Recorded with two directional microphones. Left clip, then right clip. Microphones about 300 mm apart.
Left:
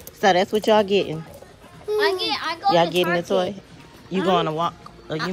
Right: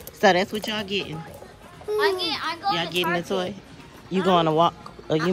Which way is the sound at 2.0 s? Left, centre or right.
Left.